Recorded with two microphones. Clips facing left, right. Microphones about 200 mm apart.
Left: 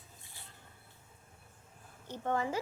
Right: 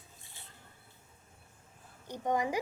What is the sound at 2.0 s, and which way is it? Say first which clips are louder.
Speech: right 2 dB; 15° right (ahead or behind).